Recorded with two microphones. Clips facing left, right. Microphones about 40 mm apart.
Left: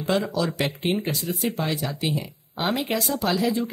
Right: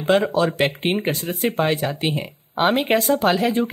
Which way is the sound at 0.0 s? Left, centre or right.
Right.